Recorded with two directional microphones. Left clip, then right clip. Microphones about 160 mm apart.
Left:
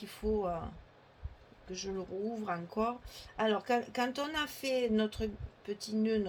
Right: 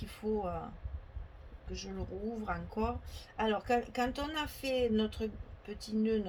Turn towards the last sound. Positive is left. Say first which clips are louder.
# left 1 dB
turn(degrees=40)  # may be behind; listen again after turning